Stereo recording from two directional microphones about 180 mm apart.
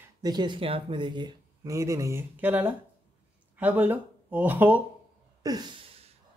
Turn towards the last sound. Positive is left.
turn(degrees=-20)  # may be behind; listen again after turning